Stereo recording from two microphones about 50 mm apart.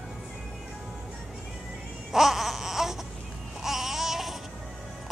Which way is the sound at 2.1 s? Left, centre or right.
Centre.